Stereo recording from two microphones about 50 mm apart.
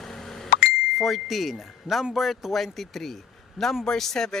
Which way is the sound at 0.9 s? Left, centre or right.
Centre.